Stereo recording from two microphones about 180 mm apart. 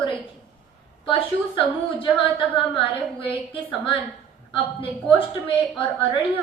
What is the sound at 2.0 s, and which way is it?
A woman's voice, 30° left (ahead or behind).